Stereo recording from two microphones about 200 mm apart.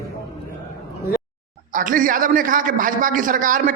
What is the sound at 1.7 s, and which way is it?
A man's voice, 40° right (ahead or behind).